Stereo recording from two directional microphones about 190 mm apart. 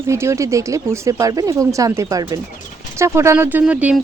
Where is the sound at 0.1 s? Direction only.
15° right (ahead or behind).